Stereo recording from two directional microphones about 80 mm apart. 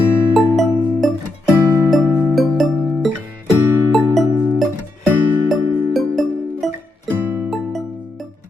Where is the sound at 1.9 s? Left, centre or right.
Centre.